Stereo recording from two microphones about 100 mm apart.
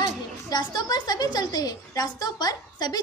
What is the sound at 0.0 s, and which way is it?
A woman's voice, 50° left (ahead or behind).